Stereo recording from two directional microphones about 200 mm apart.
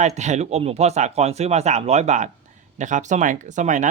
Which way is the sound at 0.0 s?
35° right (ahead or behind).